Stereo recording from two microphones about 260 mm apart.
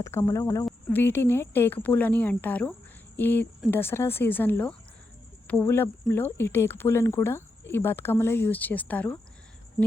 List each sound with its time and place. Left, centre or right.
0.0 s speech: centre